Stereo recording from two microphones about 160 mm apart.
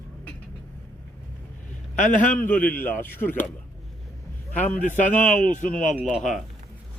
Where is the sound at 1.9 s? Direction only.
50° left (ahead or behind).